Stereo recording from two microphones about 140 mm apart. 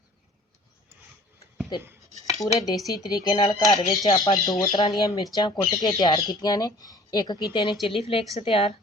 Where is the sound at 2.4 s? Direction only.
25° left (ahead or behind); by 8.7 s 40° left (ahead or behind).